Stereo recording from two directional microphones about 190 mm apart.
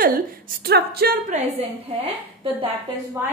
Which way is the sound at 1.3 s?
30° right (ahead or behind).